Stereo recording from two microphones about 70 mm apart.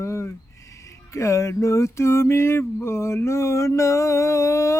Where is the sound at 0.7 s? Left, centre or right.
Left.